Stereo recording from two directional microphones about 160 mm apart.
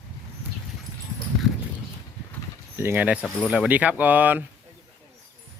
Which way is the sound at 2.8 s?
10° right (ahead or behind).